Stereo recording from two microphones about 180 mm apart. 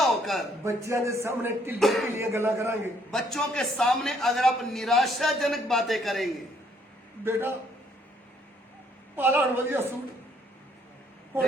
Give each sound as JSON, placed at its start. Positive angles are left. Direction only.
{"t": 0.0, "sound": "a sound", "side_deg": 0}
{"t": 0.6, "sound": "speech", "side_deg": -15}
{"t": 1.8, "sound": "a man's voice", "side_deg": 0}
{"t": 2.1, "sound": "speech", "side_deg": -15}
{"t": 3.1, "sound": "a man's voice", "side_deg": 0}
{"t": 7.3, "sound": "speech", "side_deg": -15}
{"t": 9.1, "sound": "speech", "side_deg": -15}